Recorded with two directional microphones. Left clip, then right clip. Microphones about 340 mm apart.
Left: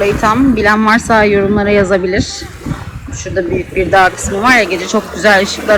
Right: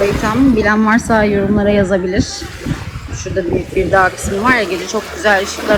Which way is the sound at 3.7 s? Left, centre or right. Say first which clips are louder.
Left 3 dB; centre.